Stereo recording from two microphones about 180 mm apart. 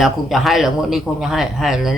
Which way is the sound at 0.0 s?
Centre (ahead or behind).